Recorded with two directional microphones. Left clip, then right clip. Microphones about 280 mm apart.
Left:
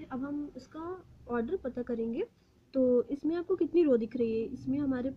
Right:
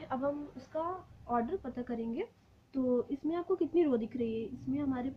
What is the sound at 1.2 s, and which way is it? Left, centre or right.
Speech, centre.